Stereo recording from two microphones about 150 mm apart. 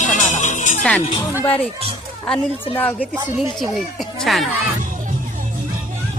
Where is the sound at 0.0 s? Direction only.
55° left (ahead or behind).